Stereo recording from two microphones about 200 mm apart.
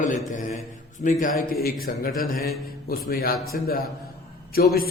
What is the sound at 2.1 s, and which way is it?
A man's voice, 45° left (ahead or behind).